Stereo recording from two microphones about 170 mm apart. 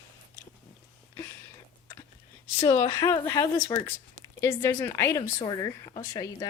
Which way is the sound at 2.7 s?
20° left (ahead or behind).